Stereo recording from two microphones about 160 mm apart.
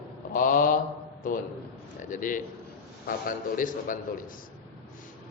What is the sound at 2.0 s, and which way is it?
A man's voice, 55° left (ahead or behind).